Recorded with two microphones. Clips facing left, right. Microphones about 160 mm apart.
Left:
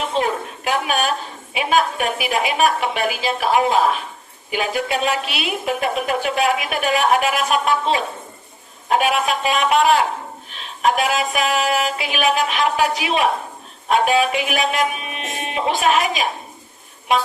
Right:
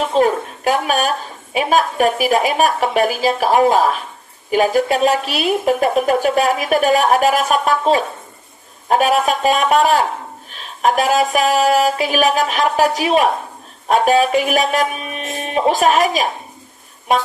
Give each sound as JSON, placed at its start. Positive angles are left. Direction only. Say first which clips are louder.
{"t": 0.1, "sound": "a woman's voice", "louder": "right 6 dB", "side_deg": -40}